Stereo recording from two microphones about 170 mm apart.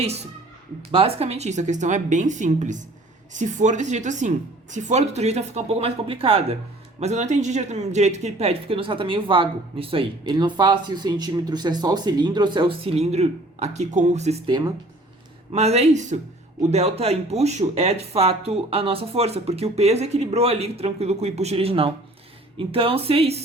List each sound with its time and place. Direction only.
0.9 s speech: 35° right (ahead or behind)
14.4 s speech: 25° right (ahead or behind)
15.5 s speech: 40° right (ahead or behind)